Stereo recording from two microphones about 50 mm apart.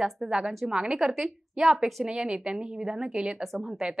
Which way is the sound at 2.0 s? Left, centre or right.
Centre.